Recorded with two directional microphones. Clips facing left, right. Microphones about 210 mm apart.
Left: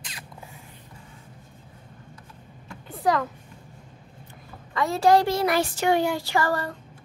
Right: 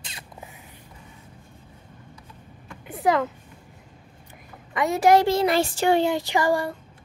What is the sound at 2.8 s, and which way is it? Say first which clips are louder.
Speech: right 2 dB; 20° right (ahead or behind).